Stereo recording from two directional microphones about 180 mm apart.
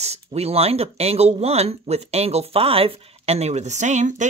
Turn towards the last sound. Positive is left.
turn(degrees=-40)  # may be behind; listen again after turning